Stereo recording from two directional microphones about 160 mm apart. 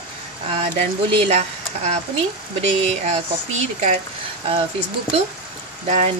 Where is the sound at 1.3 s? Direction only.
45° right (ahead or behind).